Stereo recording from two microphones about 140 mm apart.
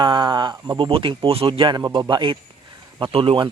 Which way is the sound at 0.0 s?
35° right (ahead or behind).